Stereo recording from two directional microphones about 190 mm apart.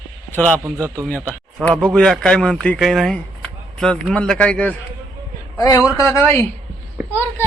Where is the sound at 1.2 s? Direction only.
5° left (ahead or behind).